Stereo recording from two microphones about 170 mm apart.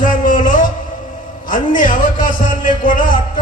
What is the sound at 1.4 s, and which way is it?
A man's voice, 50° left (ahead or behind).